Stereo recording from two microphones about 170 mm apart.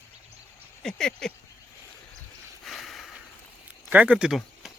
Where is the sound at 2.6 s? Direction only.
Centre (ahead or behind).